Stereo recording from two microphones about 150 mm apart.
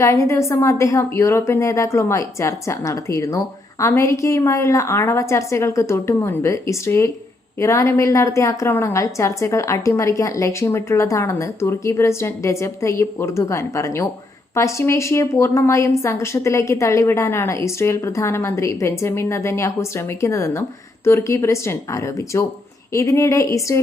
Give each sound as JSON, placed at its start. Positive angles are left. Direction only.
{"t": 0.0, "sound": "a woman's voice", "side_deg": 20}